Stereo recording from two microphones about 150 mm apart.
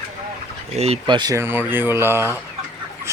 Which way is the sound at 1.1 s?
30° right (ahead or behind).